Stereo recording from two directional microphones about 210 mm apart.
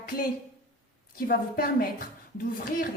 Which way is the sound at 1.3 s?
45° left (ahead or behind).